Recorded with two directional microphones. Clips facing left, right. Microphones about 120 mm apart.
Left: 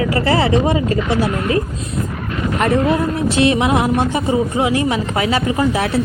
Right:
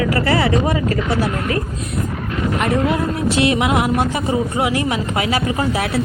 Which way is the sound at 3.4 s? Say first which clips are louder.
Left 2 dB; 30° left (ahead or behind).